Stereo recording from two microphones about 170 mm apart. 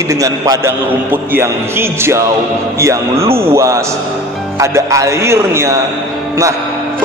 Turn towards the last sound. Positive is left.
turn(degrees=-15)  # may be behind; listen again after turning